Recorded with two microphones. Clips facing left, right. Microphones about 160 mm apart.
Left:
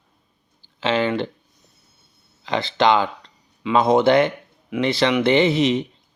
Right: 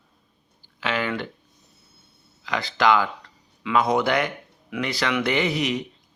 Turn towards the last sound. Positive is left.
turn(degrees=25)  # may be behind; listen again after turning